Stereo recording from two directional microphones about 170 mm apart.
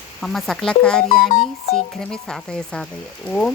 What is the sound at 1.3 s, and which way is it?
Speech, 40° left (ahead or behind).